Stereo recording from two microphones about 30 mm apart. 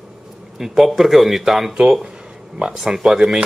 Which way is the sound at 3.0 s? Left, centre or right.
Centre.